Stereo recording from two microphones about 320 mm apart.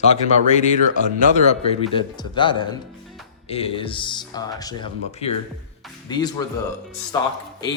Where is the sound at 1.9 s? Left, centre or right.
Centre.